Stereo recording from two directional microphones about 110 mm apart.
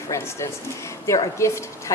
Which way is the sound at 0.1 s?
25° left (ahead or behind).